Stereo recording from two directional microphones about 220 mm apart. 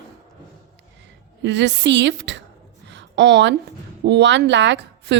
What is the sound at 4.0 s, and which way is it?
Speech, 50° right (ahead or behind).